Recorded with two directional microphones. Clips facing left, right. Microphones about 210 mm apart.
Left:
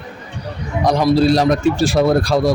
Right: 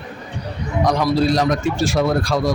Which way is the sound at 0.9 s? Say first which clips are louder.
Left 5 dB; 30° left (ahead or behind).